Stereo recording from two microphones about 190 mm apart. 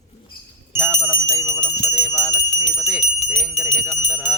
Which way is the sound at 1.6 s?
Centre (ahead or behind).